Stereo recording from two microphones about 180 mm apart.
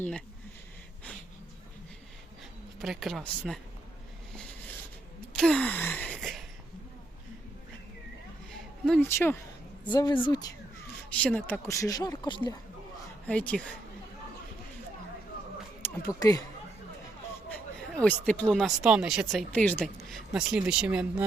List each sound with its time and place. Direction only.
2.7 s speech: centre (ahead or behind)
5.4 s gasp: 5° left (ahead or behind)
8.5 s speech: 10° left (ahead or behind)
9.8 s a woman's voice: 25° left (ahead or behind)
11.1 s speech: 5° left (ahead or behind); by 12.5 s 25° left (ahead or behind)
13.2 s speech: 5° left (ahead or behind)
16.0 s a woman's voice: 20° left (ahead or behind)
17.5 s speech: 5° left (ahead or behind)